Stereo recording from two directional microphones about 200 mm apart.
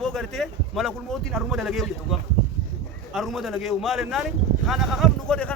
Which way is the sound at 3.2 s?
Centre (ahead or behind).